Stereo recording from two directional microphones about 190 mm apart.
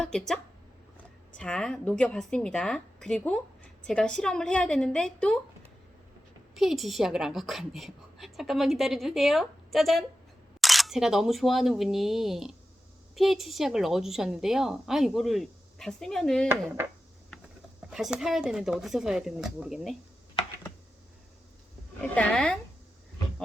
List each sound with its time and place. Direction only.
0.0 s speech: 5° left (ahead or behind)
1.4 s a woman's voice: 5° left (ahead or behind)
6.6 s a woman's voice: centre (ahead or behind)
16.5 s speech: 10° right (ahead or behind)
17.9 s a woman's voice: 5° right (ahead or behind)
22.1 s a woman's voice: 5° left (ahead or behind)